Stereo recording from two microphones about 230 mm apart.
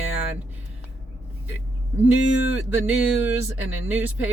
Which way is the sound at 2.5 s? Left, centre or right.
Centre.